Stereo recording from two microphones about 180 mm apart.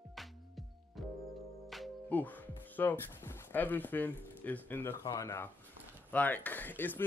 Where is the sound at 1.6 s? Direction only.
Centre (ahead or behind).